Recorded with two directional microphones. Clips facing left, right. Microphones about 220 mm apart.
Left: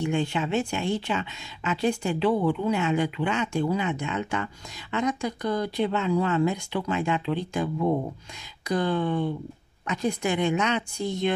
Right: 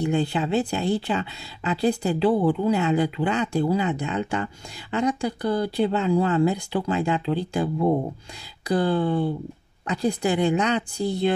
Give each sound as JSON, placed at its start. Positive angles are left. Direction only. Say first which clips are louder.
{"t": 0.0, "sound": "speech", "louder": "right 3 dB", "side_deg": -35}